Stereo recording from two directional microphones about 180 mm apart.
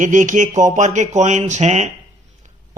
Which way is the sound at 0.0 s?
45° right (ahead or behind).